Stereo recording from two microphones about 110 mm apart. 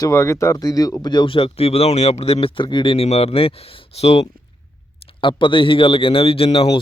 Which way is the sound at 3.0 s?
70° left (ahead or behind).